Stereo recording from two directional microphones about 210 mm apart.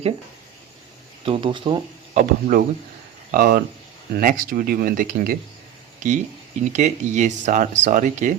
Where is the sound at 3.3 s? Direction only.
40° right (ahead or behind).